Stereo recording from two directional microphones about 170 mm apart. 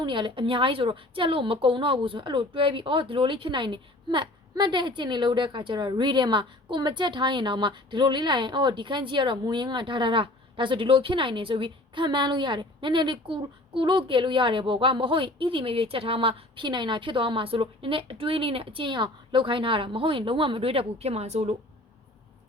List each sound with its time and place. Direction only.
0.0 s a woman's voice: 25° right (ahead or behind)